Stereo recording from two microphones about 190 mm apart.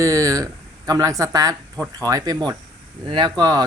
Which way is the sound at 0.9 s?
20° right (ahead or behind).